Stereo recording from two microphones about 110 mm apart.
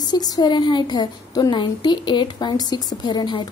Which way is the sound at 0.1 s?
40° left (ahead or behind).